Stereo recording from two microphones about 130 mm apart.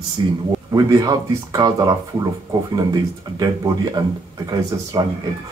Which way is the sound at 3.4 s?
30° right (ahead or behind).